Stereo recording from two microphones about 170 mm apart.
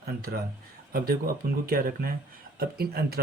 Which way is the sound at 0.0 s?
65° right (ahead or behind).